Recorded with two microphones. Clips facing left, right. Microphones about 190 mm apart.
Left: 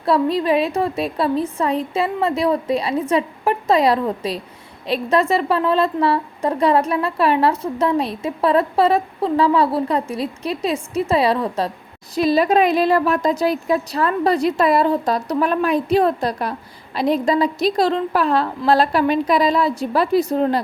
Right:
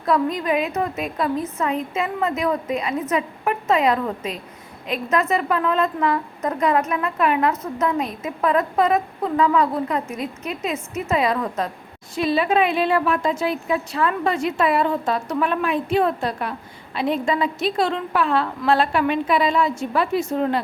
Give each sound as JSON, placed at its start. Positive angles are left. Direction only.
{"t": 0.0, "sound": "a woman's voice", "side_deg": 30}